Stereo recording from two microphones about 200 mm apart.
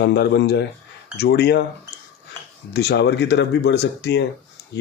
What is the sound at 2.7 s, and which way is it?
Speech, 55° left (ahead or behind).